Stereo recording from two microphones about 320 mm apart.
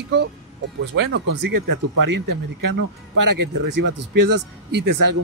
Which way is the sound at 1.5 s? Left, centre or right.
Right.